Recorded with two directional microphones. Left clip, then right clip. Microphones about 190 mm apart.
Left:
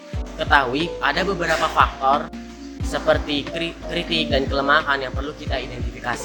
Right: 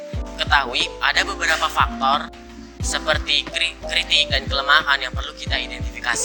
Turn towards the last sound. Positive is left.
turn(degrees=-40)  # may be behind; listen again after turning